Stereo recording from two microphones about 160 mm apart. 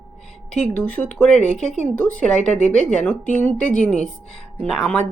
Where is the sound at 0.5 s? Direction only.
5° left (ahead or behind).